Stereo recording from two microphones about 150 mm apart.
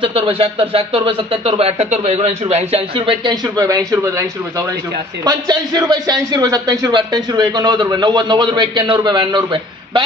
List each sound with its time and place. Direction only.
0.0 s speech: 35° right (ahead or behind)
3.4 s a man's voice: 25° right (ahead or behind)